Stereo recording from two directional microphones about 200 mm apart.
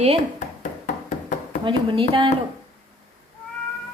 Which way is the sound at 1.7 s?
25° right (ahead or behind).